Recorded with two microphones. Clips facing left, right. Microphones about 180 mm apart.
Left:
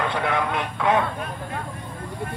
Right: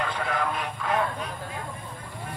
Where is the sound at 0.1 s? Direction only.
70° left (ahead or behind).